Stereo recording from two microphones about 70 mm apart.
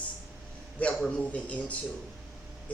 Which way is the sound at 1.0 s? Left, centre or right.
Centre.